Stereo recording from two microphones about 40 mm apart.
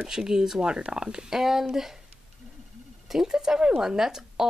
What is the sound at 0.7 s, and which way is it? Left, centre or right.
Speech, right.